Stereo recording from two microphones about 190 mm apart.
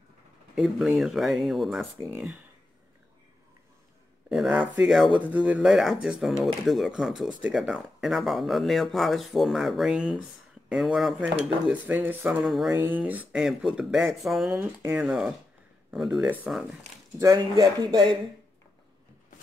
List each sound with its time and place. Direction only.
0.6 s speech: centre (ahead or behind)
1.8 s dishes: 10° right (ahead or behind)
4.3 s speech: 5° right (ahead or behind)
11.4 s dishes: 10° right (ahead or behind)
12.7 s speech: 10° right (ahead or behind)
14.5 s dishes: 10° right (ahead or behind)
15.9 s speech: centre (ahead or behind)
17.2 s speech: 20° right (ahead or behind)